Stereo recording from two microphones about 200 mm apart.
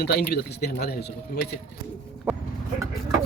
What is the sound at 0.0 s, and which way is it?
Speech, 55° left (ahead or behind).